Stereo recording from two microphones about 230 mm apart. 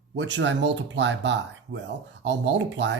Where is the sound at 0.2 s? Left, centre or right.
Right.